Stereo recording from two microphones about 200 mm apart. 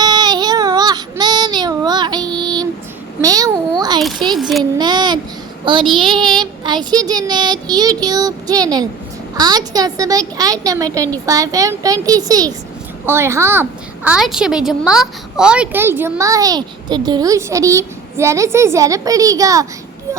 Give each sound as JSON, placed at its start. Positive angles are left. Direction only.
{"t": 0.0, "sound": "child singing", "side_deg": -20}
{"t": 3.2, "sound": "a sound", "side_deg": -15}
{"t": 4.4, "sound": "child singing", "side_deg": 0}
{"t": 4.8, "sound": "child singing", "side_deg": -20}
{"t": 5.7, "sound": "a child's voice", "side_deg": -25}